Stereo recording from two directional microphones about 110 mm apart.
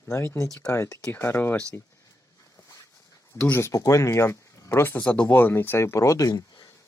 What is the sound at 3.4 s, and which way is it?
Speech, 20° left (ahead or behind).